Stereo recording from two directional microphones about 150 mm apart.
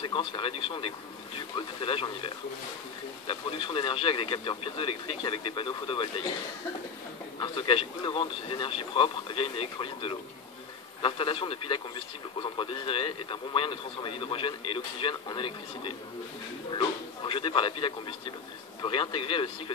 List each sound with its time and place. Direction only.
0.0 s a man's voice: 35° left (ahead or behind)
7.3 s a man's voice: 35° left (ahead or behind)